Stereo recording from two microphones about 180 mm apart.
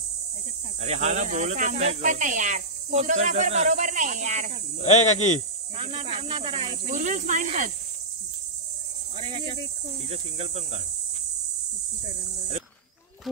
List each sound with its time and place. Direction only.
0.7 s speech: 40° right (ahead or behind)
4.8 s speech: 40° left (ahead or behind)
5.8 s speech: 35° right (ahead or behind)
9.1 s speech: 35° right (ahead or behind)